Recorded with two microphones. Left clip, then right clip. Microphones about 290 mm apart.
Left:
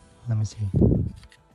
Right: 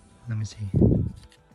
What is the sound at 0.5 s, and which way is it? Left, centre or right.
Speech, centre.